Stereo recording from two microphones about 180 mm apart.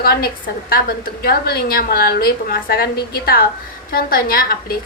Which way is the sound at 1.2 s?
60° left (ahead or behind).